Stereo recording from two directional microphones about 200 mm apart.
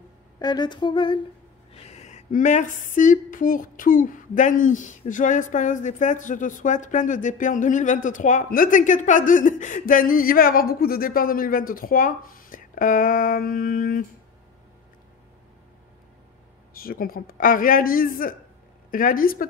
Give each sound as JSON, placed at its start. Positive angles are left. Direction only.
{"t": 0.4, "sound": "humming", "side_deg": 20}
{"t": 1.7, "sound": "a sound", "side_deg": 30}
{"t": 16.7, "sound": "speech", "side_deg": 45}